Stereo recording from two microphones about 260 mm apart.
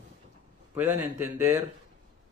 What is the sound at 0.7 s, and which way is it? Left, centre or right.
Speech, centre.